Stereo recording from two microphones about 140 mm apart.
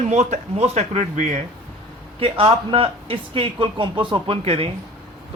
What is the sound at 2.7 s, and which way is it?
A man's voice, 40° right (ahead or behind).